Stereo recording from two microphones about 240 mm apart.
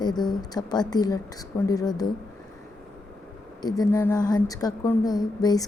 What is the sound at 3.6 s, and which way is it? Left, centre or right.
A woman's voice, centre.